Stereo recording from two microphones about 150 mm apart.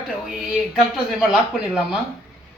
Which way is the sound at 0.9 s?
5° right (ahead or behind).